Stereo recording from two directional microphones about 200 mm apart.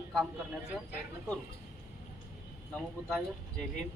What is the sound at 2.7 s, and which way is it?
Speech, centre (ahead or behind).